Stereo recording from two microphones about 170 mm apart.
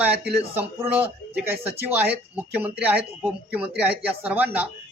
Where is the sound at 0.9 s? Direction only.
10° right (ahead or behind).